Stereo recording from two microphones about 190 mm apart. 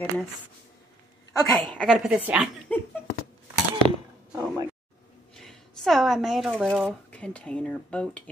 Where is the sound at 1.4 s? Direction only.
5° left (ahead or behind).